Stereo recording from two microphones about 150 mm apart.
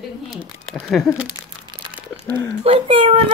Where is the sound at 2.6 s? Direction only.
40° right (ahead or behind).